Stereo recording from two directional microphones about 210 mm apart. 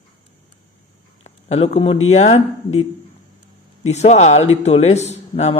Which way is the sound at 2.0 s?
30° left (ahead or behind).